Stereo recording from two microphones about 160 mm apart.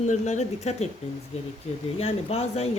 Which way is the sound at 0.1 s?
45° left (ahead or behind).